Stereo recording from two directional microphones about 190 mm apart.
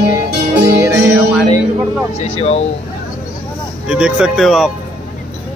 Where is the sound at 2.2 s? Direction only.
35° left (ahead or behind).